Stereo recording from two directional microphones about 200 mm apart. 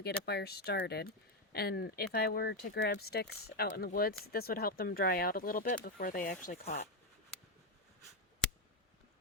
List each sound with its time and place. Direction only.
0.0 s speech: 55° left (ahead or behind); by 6.8 s 40° left (ahead or behind)